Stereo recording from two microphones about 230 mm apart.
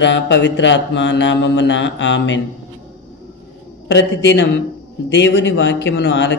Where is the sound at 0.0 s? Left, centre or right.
Left.